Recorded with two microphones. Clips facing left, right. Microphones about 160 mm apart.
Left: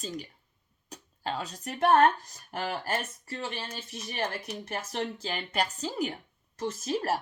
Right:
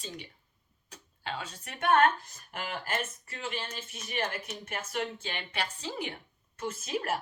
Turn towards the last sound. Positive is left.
turn(degrees=35)  # may be behind; listen again after turning